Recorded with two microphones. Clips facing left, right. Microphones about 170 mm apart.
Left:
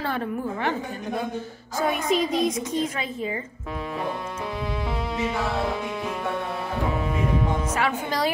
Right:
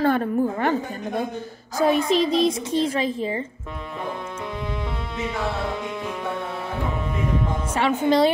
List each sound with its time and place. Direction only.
0.0 s a woman's voice: 45° right (ahead or behind)
1.9 s a child's voice: 30° right (ahead or behind)
7.7 s a woman's voice: 25° right (ahead or behind)